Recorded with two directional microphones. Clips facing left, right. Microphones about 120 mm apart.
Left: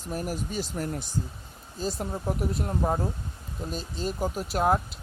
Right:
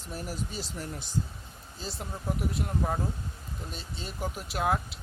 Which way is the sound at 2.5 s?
35° left (ahead or behind).